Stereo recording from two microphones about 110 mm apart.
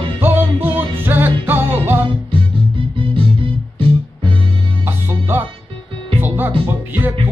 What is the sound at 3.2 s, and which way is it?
Music, 50° right (ahead or behind).